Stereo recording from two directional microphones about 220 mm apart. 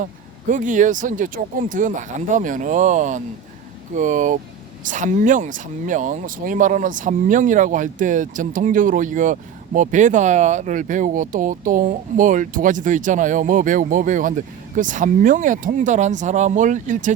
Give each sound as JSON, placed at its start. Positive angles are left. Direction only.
{"t": 0.0, "sound": "speech", "side_deg": -35}